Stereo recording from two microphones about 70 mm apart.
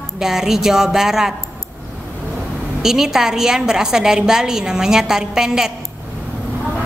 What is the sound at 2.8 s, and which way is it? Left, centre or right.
A woman's voice, centre.